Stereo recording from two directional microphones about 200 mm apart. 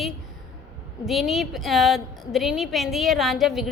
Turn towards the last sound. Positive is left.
turn(degrees=0)  # may be behind; listen again after turning